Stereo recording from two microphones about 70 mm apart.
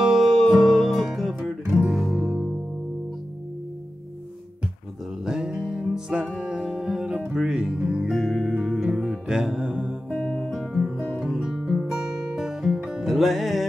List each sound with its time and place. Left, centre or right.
0.0 s music: centre
2.2 s music: centre
5.2 s music: centre
10.0 s guitar: centre
11.6 s music: centre